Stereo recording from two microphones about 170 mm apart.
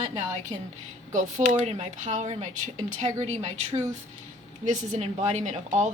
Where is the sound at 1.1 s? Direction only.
45° right (ahead or behind).